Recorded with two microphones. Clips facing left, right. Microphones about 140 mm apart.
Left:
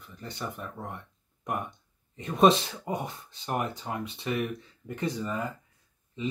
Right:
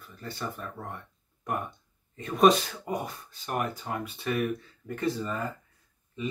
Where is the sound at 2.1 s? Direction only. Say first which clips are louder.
Even; 25° left (ahead or behind).